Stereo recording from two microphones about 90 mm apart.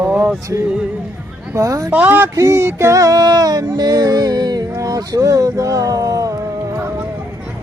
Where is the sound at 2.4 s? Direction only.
30° right (ahead or behind).